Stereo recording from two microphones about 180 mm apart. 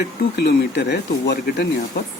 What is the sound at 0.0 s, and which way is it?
Speech, 65° left (ahead or behind).